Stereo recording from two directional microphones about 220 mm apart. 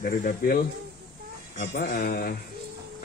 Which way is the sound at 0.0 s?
40° left (ahead or behind).